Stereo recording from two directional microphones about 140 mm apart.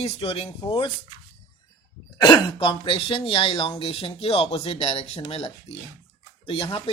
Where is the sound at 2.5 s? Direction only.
35° left (ahead or behind).